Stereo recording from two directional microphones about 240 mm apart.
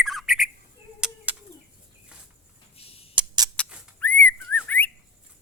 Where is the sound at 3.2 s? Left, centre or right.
Centre.